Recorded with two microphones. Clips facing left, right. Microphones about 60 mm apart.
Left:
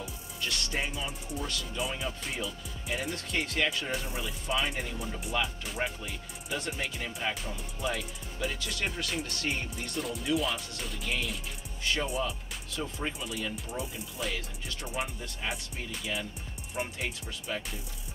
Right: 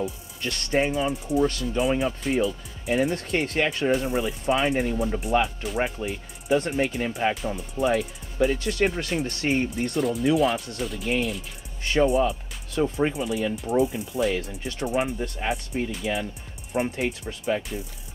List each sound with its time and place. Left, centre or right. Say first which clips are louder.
0.4 s speech: right 9 dB; right
3.9 s speech: right 11 dB; right
9.9 s speech: right 9 dB; centre
11.8 s speech: right 10 dB; right
13.1 s speech: right 10 dB; right
16.7 s speech: right 9 dB; right